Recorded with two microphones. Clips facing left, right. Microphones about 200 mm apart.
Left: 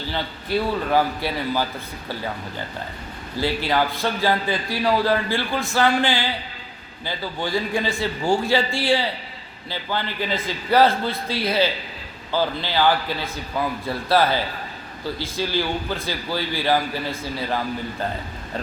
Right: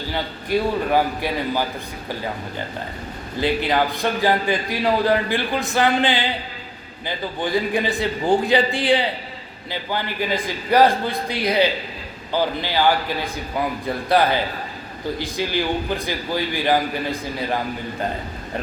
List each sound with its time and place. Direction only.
0.1 s a man's voice: 15° right (ahead or behind)
3.4 s a man's voice: 20° right (ahead or behind)